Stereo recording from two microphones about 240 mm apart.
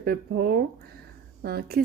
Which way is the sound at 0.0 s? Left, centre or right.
Right.